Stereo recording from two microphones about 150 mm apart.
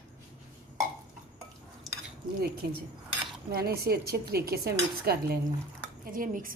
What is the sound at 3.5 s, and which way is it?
Dishes, 90° right.